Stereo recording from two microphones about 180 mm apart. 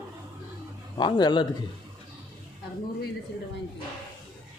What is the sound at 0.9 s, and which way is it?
Speech, 25° left (ahead or behind).